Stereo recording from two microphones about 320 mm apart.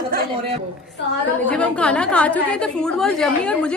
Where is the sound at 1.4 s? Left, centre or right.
Centre.